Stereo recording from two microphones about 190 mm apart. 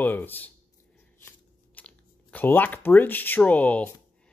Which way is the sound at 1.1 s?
10° left (ahead or behind).